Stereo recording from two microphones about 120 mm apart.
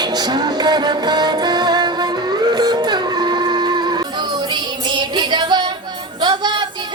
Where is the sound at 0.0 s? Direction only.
35° right (ahead or behind).